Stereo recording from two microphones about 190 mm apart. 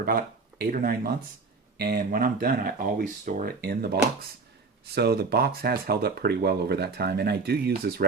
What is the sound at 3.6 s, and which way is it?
Speech, 55° right (ahead or behind).